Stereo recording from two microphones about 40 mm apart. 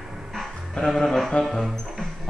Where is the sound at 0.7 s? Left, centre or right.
Centre.